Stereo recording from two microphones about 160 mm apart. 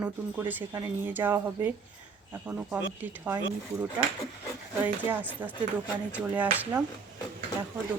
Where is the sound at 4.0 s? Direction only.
15° right (ahead or behind).